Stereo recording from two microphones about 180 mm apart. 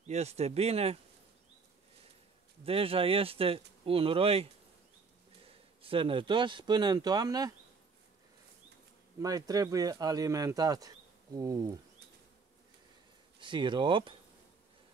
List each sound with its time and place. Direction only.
0.0 s speech: 40° right (ahead or behind)
2.6 s speech: 30° right (ahead or behind)
5.5 s speech: 30° right (ahead or behind)
9.2 s speech: 20° right (ahead or behind)
13.4 s speech: 25° right (ahead or behind)